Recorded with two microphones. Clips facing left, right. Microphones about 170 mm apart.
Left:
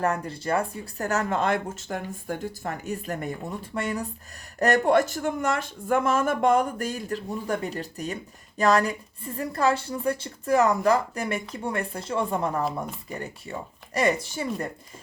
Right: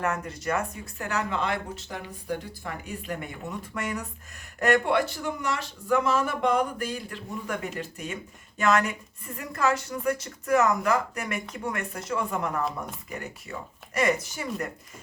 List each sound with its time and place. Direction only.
0.0 s speech: 30° left (ahead or behind)